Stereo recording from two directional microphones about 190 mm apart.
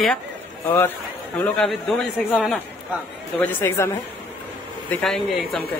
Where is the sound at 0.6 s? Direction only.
15° left (ahead or behind).